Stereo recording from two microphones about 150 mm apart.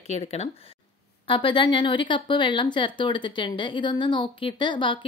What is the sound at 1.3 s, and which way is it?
Speech, 35° left (ahead or behind).